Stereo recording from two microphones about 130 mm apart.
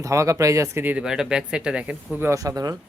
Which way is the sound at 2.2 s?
25° right (ahead or behind).